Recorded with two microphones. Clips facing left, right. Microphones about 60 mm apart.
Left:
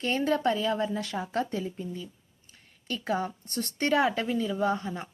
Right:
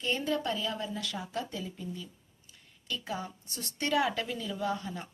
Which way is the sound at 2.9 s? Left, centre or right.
Left.